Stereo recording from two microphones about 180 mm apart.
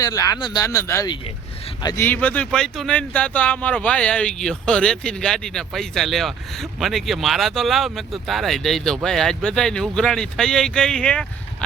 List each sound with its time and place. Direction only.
0.0 s speech: 20° left (ahead or behind)